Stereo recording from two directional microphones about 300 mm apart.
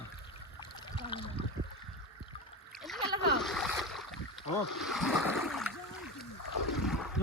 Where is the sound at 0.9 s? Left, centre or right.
Centre.